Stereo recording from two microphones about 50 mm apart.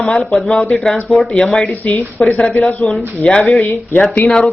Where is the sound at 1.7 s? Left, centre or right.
Left.